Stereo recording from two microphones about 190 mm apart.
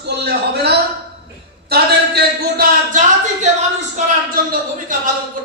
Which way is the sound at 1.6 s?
55° right (ahead or behind).